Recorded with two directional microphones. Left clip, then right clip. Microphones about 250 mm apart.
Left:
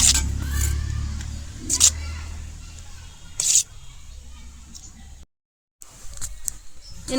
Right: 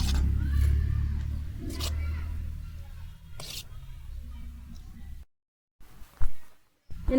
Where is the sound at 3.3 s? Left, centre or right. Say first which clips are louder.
Left 19 dB; centre.